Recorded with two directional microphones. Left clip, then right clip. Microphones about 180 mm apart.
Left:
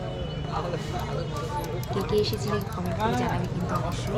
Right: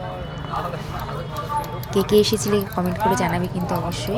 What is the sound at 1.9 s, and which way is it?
Speech, 45° right (ahead or behind).